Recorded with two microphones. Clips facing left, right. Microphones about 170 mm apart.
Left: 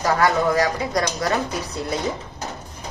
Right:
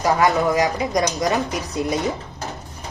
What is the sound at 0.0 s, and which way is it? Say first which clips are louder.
A man's voice: right 1 dB; 15° right (ahead or behind).